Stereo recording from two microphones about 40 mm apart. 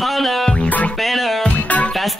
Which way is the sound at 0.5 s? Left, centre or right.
Left.